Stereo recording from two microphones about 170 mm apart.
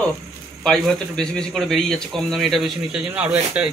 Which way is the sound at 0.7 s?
5° left (ahead or behind).